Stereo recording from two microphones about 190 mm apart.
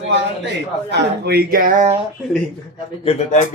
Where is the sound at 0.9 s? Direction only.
60° right (ahead or behind); by 2.0 s 40° right (ahead or behind).